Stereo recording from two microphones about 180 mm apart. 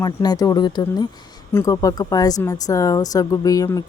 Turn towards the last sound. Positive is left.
turn(degrees=20)  # may be behind; listen again after turning